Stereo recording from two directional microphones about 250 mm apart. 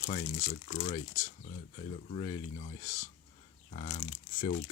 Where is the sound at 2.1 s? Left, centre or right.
Left.